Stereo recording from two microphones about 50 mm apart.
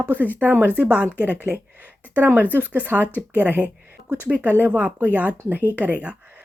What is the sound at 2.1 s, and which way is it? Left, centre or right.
Speech, right.